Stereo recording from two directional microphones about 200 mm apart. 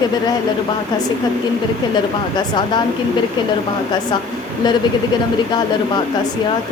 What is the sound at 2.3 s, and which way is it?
Speech, 20° left (ahead or behind).